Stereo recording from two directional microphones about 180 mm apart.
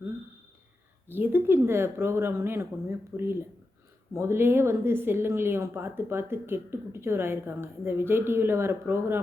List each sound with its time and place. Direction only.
1.1 s a woman's voice: 10° right (ahead or behind)